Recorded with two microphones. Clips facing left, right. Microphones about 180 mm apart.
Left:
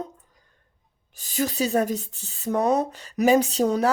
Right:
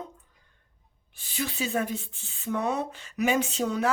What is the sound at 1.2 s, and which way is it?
Speech, 40° left (ahead or behind).